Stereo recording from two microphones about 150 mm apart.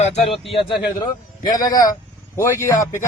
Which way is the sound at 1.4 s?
25° left (ahead or behind).